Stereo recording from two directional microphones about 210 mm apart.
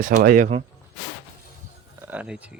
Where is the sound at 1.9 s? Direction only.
10° right (ahead or behind).